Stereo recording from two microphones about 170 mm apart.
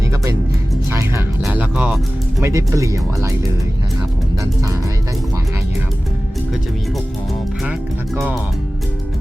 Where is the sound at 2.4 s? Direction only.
20° right (ahead or behind).